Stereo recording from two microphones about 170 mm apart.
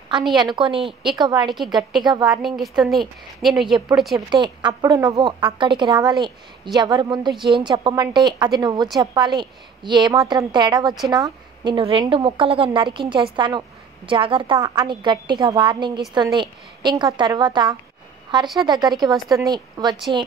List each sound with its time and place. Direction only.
0.4 s a woman's voice: 25° right (ahead or behind)
2.4 s a woman's voice: centre (ahead or behind)
4.3 s a woman's voice: 25° right (ahead or behind)